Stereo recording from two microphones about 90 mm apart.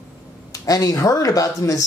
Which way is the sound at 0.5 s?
40° left (ahead or behind).